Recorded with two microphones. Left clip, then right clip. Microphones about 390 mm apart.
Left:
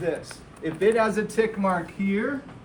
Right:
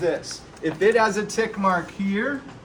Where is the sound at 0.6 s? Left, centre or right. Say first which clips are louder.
Right 3 dB; centre.